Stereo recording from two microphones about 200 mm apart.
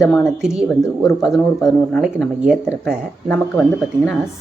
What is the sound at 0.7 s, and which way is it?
Speech, 15° left (ahead or behind).